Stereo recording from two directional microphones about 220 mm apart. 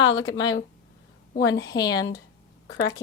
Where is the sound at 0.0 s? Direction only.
60° left (ahead or behind).